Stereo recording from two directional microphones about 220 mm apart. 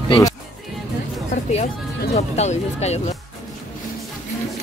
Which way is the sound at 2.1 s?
30° left (ahead or behind).